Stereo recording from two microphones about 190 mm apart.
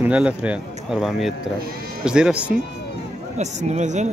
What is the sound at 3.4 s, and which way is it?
Speech, 40° right (ahead or behind).